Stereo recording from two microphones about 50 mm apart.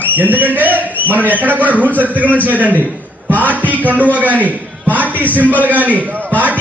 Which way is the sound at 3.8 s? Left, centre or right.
Right.